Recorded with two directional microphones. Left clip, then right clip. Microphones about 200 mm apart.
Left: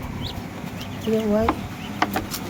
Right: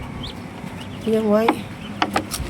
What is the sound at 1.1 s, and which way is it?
Speech, 20° right (ahead or behind).